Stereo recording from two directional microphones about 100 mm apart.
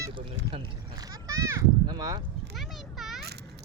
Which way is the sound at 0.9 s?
35° right (ahead or behind).